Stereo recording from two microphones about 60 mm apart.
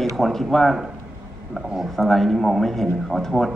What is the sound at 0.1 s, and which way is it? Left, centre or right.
Speech, centre.